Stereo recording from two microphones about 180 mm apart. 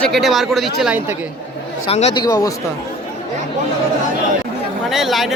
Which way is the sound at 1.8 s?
35° left (ahead or behind).